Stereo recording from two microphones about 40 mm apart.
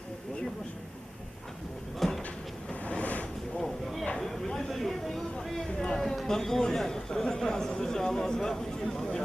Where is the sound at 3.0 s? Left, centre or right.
Left.